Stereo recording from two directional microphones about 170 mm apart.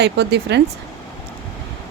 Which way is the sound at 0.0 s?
80° right.